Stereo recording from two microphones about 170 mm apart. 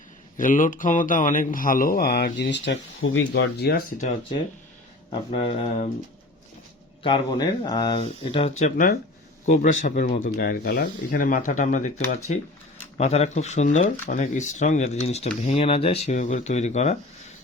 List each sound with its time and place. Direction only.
0.3 s mantra: 50° left (ahead or behind); by 2.7 s 90° left
3.2 s speech: 80° left; by 4.1 s 50° left (ahead or behind)
5.3 s speech: 35° left (ahead or behind)
7.0 s speech: 25° left (ahead or behind)
9.5 s mantra: 50° left (ahead or behind)
10.3 s mantra: 60° left (ahead or behind); by 12.4 s 40° left (ahead or behind)
13.0 s speech: 40° left (ahead or behind)
14.1 s mantra: 45° left (ahead or behind)
15.4 s speech: 35° left (ahead or behind)